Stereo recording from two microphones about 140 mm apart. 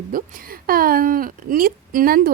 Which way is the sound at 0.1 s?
80° right.